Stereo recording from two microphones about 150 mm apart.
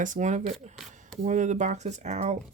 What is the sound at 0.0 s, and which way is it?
Speech, 55° right (ahead or behind).